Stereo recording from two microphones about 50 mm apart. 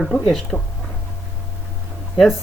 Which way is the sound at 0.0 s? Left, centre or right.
Centre.